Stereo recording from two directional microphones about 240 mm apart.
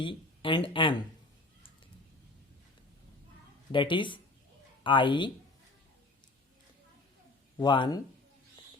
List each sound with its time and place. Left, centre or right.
0.0 s speech: left
3.7 s speech: centre
7.6 s speech: centre